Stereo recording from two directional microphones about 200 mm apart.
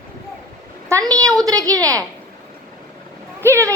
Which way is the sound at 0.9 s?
15° right (ahead or behind).